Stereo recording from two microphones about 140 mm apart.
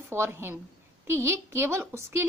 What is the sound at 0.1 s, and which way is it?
Speech, 15° right (ahead or behind).